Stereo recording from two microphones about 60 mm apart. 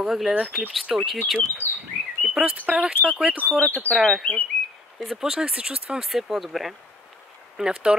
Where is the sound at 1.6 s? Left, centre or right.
Left.